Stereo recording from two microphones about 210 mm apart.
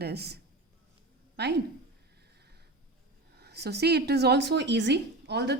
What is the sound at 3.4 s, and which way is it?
A woman's voice, 50° right (ahead or behind).